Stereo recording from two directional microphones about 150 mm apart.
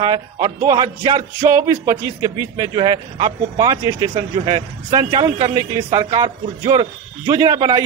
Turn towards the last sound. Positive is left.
turn(degrees=-25)  # may be behind; listen again after turning